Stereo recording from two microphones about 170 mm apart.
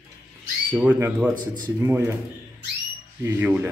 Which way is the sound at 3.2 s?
10° right (ahead or behind).